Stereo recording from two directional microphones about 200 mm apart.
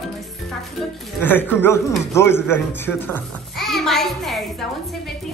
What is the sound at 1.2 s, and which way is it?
A child's voice, 10° left (ahead or behind).